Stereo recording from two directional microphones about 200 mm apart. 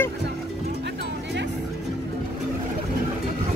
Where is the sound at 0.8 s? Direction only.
60° right (ahead or behind).